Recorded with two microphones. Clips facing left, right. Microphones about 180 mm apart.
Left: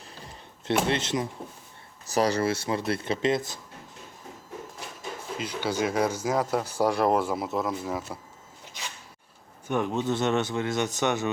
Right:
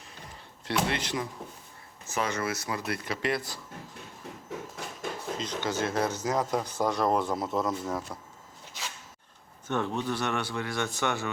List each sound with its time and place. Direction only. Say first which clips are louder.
0.6 s speech: left 4 dB; 25° left (ahead or behind)
2.0 s speech: left 6 dB; 35° left (ahead or behind); by 3.6 s 20° left (ahead or behind)
5.4 s speech: left 4 dB; 10° left (ahead or behind)
9.6 s speech: left 3 dB; 15° left (ahead or behind)